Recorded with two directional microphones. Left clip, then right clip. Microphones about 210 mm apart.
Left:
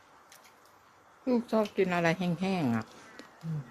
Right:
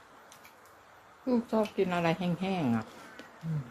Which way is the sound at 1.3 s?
20° left (ahead or behind).